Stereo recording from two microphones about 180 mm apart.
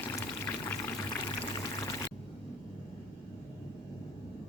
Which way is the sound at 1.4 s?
20° left (ahead or behind).